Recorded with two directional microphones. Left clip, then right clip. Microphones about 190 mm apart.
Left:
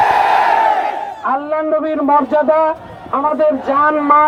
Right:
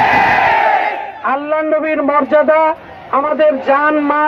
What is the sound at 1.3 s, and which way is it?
A man's voice, 30° right (ahead or behind).